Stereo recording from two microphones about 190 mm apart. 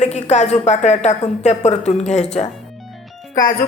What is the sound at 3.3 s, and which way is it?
Speech, 45° left (ahead or behind).